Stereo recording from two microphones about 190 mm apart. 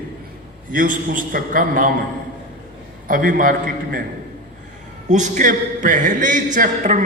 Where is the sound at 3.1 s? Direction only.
45° right (ahead or behind).